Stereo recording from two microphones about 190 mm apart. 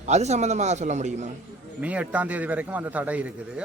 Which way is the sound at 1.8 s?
5° right (ahead or behind).